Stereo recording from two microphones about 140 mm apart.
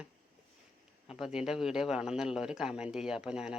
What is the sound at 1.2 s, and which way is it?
Speech, 5° right (ahead or behind).